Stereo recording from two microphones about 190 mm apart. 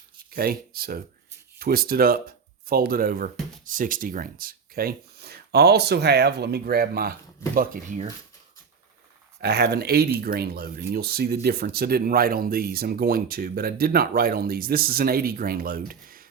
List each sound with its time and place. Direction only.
0.3 s speech: 50° right (ahead or behind)
9.4 s speech: 60° right (ahead or behind)